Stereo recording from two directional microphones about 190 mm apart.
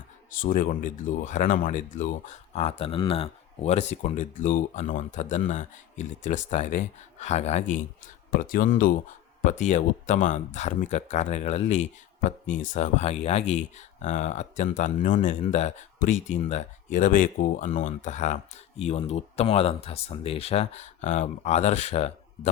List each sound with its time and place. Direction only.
0.3 s speech: 45° left (ahead or behind)
8.3 s speech: 50° left (ahead or behind)